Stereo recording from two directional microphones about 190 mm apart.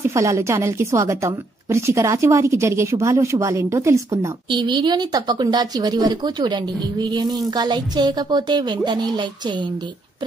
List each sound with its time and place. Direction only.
0.0 s a woman's voice: 15° right (ahead or behind)